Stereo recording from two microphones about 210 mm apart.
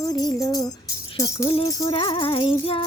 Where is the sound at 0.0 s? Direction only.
20° left (ahead or behind).